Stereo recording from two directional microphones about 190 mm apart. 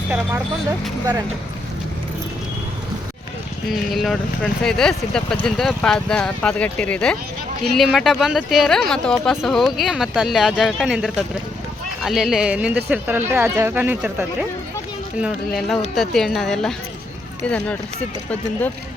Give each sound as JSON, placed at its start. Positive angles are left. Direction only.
{"t": 3.7, "sound": "speech", "side_deg": 0}